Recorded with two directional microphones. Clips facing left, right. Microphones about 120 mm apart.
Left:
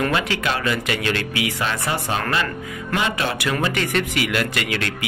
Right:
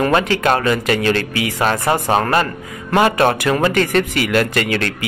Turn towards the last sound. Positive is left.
turn(degrees=-45)  # may be behind; listen again after turning